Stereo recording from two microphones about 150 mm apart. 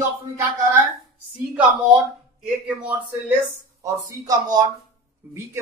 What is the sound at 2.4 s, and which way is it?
Speech, 10° right (ahead or behind).